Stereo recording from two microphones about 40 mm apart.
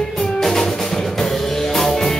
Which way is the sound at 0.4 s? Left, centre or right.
Centre.